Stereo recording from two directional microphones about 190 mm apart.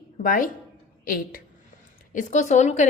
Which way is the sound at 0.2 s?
45° left (ahead or behind).